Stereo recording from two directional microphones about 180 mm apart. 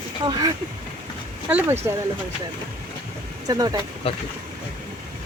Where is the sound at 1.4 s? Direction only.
10° right (ahead or behind).